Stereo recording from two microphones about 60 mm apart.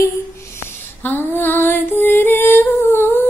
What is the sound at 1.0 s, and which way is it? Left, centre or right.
Female singing, left.